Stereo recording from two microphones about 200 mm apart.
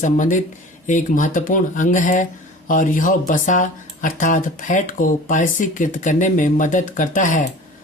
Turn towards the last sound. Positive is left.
turn(degrees=40)  # may be behind; listen again after turning